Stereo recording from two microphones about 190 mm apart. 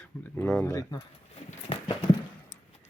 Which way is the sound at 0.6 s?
20° left (ahead or behind).